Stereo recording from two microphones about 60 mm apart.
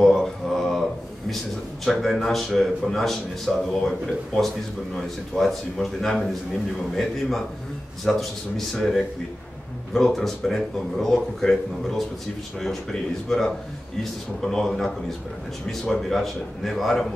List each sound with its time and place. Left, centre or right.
0.0 s mantra: centre
1.9 s speech: centre
4.9 s speech: centre
13.3 s a man's voice: centre